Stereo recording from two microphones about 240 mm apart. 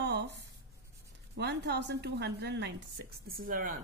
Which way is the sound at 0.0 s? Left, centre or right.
Right.